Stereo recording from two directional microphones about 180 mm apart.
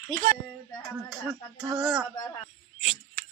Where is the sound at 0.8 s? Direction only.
5° right (ahead or behind).